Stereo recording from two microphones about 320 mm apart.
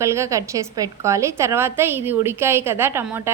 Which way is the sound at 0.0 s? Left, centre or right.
Centre.